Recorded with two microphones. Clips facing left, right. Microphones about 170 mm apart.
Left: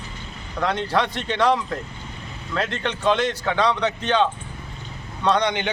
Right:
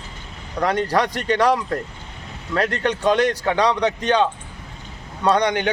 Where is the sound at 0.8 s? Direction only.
40° right (ahead or behind).